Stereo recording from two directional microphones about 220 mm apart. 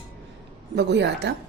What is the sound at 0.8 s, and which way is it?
Speech, 50° right (ahead or behind).